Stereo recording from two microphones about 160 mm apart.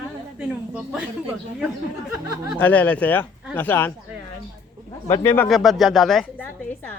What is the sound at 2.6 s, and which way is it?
Speech, 10° left (ahead or behind).